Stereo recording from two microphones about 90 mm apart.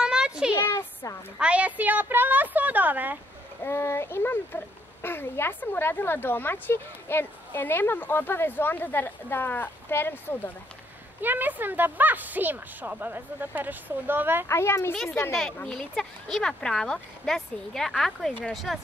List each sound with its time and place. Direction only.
0.0 s a sound: 10° right (ahead or behind)
0.6 s a sound: 30° left (ahead or behind)
1.4 s speech: 15° right (ahead or behind)
3.6 s a woman's voice: 30° left (ahead or behind)
11.1 s speech: 20° right (ahead or behind)
14.5 s a woman's voice: 30° left (ahead or behind)
15.3 s speech: 5° left (ahead or behind)